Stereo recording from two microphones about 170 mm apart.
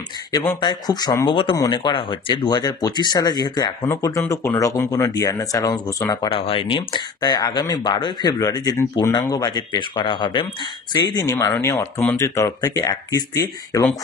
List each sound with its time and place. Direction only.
0.3 s speech: 15° left (ahead or behind)
0.6 s speech: 25° left (ahead or behind)
11.2 s speech: 15° left (ahead or behind)